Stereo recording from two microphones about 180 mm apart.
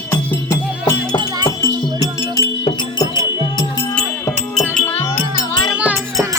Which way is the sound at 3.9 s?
5° left (ahead or behind).